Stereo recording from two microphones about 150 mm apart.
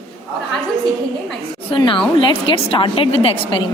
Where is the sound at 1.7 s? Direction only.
35° left (ahead or behind).